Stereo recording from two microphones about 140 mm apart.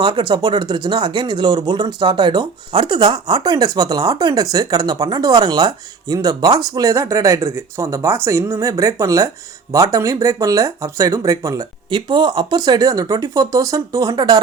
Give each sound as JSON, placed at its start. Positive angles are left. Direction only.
{"t": 0.0, "sound": "speech", "side_deg": -35}